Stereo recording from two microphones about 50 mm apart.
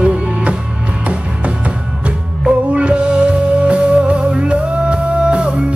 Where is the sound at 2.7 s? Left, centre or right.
Right.